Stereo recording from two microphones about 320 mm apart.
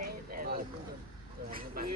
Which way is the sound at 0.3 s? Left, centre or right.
Right.